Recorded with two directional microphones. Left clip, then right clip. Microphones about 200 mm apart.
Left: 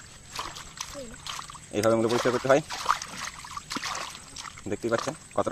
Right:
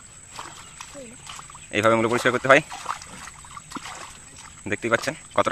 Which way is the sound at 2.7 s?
15° left (ahead or behind).